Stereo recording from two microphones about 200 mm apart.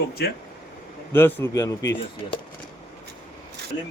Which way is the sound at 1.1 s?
10° left (ahead or behind).